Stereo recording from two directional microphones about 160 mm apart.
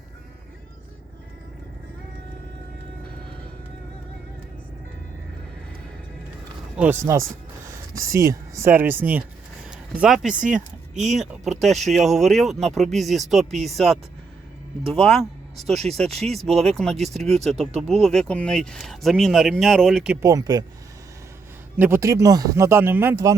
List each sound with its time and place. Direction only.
6.7 s speech: 15° right (ahead or behind)
9.6 s a sound: 5° right (ahead or behind)
10.3 s speech: 55° right (ahead or behind)
11.2 s speech: centre (ahead or behind)
17.0 s speech: 45° right (ahead or behind)
17.2 s speech: 5° left (ahead or behind)
20.2 s speech: 25° right (ahead or behind)
21.8 s speech: 15° right (ahead or behind)